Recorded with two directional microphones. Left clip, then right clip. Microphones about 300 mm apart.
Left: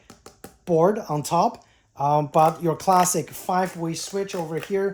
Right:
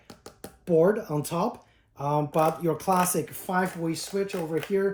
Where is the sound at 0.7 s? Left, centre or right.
Left.